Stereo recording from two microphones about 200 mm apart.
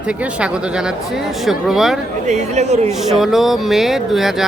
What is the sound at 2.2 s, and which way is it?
Speech, 35° right (ahead or behind).